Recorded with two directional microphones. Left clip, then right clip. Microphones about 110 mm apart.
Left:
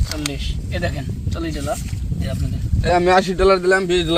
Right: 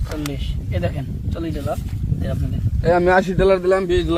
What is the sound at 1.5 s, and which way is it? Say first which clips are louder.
Speech: left 1 dB; 40° left (ahead or behind).